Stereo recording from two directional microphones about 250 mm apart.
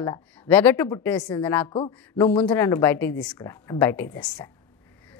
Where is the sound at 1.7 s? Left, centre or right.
Left.